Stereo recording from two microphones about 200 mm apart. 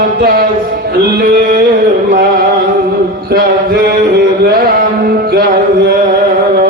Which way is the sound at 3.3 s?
50° right (ahead or behind).